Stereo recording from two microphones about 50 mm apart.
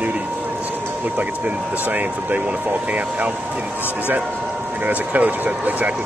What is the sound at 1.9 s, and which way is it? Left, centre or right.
Speech, right.